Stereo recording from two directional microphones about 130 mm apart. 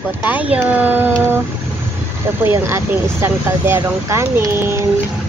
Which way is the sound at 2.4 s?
20° right (ahead or behind).